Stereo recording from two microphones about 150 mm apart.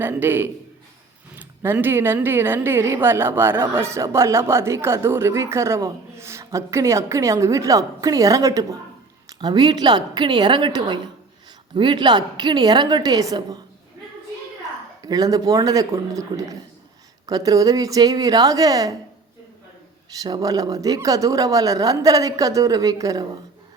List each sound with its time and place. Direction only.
0.0 s a man's voice: 15° right (ahead or behind)
15.0 s speech: 25° right (ahead or behind)
20.2 s speech: 25° right (ahead or behind)